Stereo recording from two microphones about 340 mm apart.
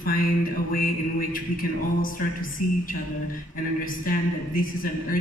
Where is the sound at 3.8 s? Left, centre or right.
Left.